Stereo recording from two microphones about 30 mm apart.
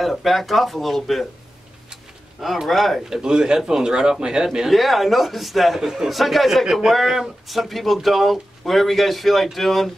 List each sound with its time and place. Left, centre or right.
0.0 s speech: centre
2.7 s speech: centre
3.1 s speech: right
4.6 s speech: centre
5.8 s speech: centre
6.0 s speech: centre